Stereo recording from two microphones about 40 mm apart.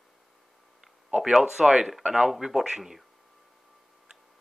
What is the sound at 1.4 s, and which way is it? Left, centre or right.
Speech, centre.